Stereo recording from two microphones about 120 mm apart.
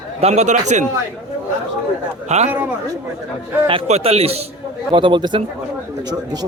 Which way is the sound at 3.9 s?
60° right (ahead or behind).